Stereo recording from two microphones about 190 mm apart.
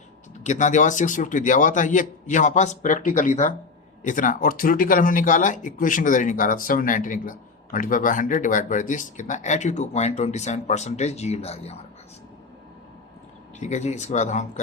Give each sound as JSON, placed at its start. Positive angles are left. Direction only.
{"t": 0.4, "sound": "a man's voice", "side_deg": 40}
{"t": 13.6, "sound": "a man's voice", "side_deg": 40}